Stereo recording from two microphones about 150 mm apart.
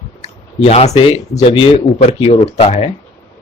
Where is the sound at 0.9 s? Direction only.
40° left (ahead or behind).